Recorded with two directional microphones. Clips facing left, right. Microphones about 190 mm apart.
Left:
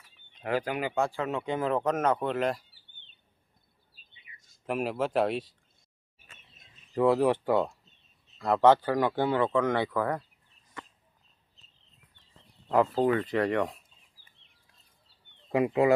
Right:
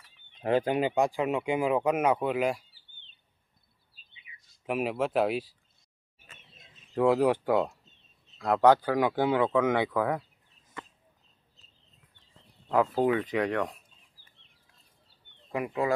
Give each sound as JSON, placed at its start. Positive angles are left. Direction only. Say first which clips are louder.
{"t": 0.3, "sound": "speech", "louder": "right 4 dB", "side_deg": -25}
{"t": 4.6, "sound": "speech", "louder": "right 1 dB", "side_deg": -5}
{"t": 7.1, "sound": "speech", "louder": "right 1 dB", "side_deg": -5}
{"t": 12.6, "sound": "speech", "louder": "left 1 dB", "side_deg": 0}
{"t": 15.5, "sound": "speech", "louder": "left 5 dB", "side_deg": 20}